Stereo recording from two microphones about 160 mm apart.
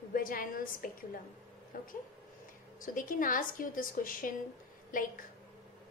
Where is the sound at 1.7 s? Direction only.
60° left (ahead or behind).